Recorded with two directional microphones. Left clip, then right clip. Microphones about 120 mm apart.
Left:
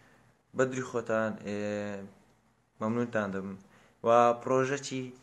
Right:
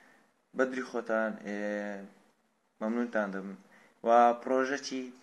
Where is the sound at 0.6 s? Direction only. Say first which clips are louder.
Left 1 dB; 20° left (ahead or behind).